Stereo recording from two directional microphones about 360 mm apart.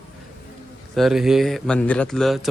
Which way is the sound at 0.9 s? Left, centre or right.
Centre.